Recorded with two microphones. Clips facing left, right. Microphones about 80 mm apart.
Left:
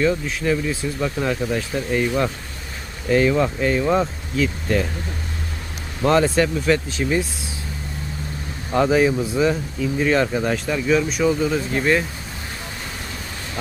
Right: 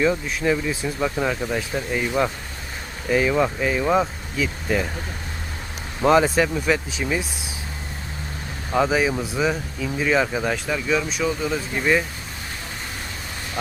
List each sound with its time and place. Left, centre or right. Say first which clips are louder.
0.0 s speech: left 1 dB; centre
1.0 s speech: left 1 dB; centre
6.1 s speech: even; centre
8.7 s speech: left 3 dB; centre